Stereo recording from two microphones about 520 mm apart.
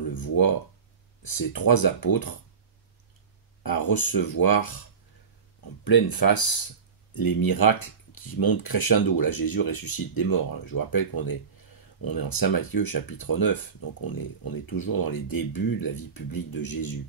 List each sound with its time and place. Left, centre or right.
0.1 s speech: left
3.6 s speech: left
5.9 s speech: left
12.0 s speech: left